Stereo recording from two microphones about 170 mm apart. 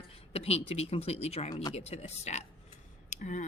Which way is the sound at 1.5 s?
25° left (ahead or behind).